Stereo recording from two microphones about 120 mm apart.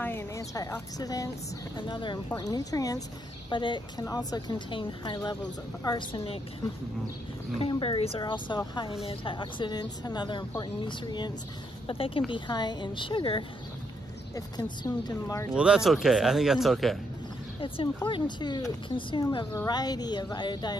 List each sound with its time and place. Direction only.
0.0 s speech: 20° left (ahead or behind)
3.4 s a woman's voice: 40° left (ahead or behind)
7.6 s a woman's voice: 50° left (ahead or behind)
8.2 s speech: 40° left (ahead or behind)
11.9 s a woman's voice: 50° left (ahead or behind)
12.3 s a woman's voice: 40° left (ahead or behind)
15.5 s speech: 5° right (ahead or behind)
18.0 s speech: 40° left (ahead or behind)
19.5 s speech: 30° left (ahead or behind)